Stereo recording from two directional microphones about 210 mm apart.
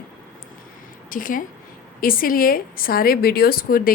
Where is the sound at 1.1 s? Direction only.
40° left (ahead or behind).